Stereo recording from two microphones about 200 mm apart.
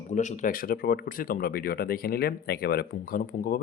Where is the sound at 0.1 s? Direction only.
35° left (ahead or behind).